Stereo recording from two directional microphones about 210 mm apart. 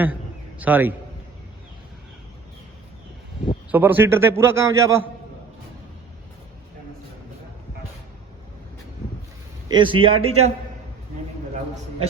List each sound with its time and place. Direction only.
0.6 s a man's voice: 10° right (ahead or behind)
3.7 s a man's voice: 10° right (ahead or behind)
9.6 s a man's voice: 20° right (ahead or behind)